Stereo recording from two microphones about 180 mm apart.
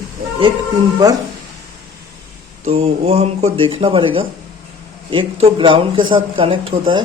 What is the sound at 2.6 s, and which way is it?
Speech, 35° right (ahead or behind).